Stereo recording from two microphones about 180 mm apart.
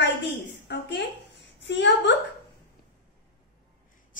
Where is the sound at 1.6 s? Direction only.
80° left.